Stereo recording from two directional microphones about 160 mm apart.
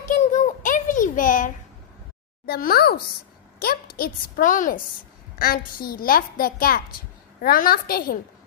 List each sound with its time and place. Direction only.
0.0 s a sound: 55° left (ahead or behind)
2.4 s a woman's voice: 70° left (ahead or behind); by 4.8 s 55° left (ahead or behind)
5.4 s a woman's voice: 65° left (ahead or behind)